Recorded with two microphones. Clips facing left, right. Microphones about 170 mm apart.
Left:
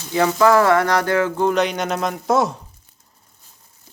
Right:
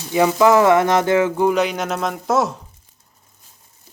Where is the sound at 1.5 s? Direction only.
5° right (ahead or behind).